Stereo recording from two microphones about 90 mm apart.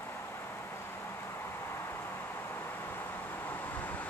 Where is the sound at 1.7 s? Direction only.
25° left (ahead or behind).